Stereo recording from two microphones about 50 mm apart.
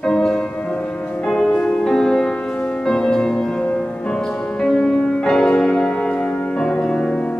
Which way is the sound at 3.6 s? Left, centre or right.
Left.